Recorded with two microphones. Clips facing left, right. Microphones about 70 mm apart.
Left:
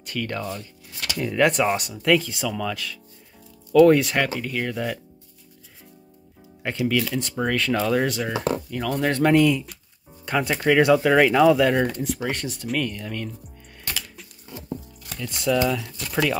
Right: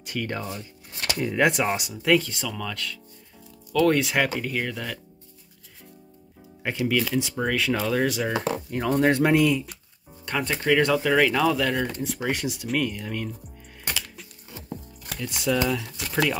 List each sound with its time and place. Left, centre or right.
0.0 s speech: centre
6.6 s speech: centre
8.6 s speech: right
8.9 s speech: centre
15.1 s speech: centre